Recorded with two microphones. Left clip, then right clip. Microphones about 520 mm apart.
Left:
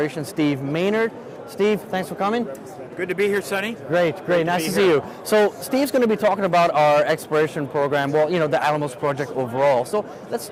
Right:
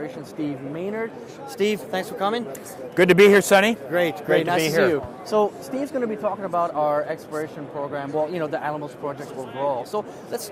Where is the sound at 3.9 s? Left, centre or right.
Left.